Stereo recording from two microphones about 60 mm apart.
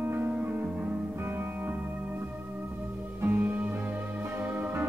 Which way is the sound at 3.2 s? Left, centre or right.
Right.